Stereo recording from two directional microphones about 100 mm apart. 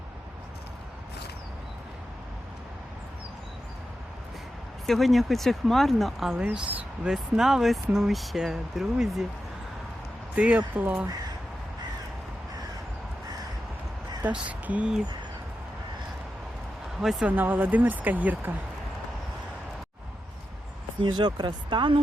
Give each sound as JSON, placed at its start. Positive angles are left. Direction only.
{"t": 4.9, "sound": "speech", "side_deg": 0}
{"t": 10.3, "sound": "speech", "side_deg": -10}
{"t": 14.3, "sound": "speech", "side_deg": -15}
{"t": 17.0, "sound": "speech", "side_deg": -5}
{"t": 17.2, "sound": "speech", "side_deg": -15}
{"t": 21.0, "sound": "speech", "side_deg": -50}